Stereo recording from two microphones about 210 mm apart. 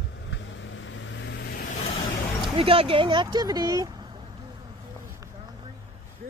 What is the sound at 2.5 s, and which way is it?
Speech, 25° right (ahead or behind).